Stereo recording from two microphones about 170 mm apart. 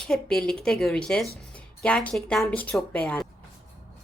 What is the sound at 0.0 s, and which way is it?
Speech, centre (ahead or behind).